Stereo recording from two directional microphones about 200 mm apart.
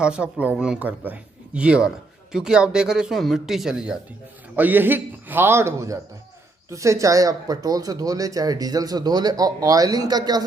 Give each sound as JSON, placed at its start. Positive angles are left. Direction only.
{"t": 0.0, "sound": "speech", "side_deg": -5}